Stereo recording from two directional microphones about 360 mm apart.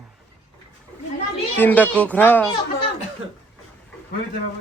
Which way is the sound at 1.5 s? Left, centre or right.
Centre.